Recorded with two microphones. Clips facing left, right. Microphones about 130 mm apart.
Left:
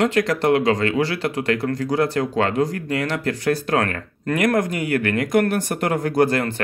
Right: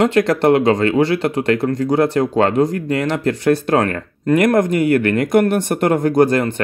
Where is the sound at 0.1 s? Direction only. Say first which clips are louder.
Right 5 dB; 25° right (ahead or behind).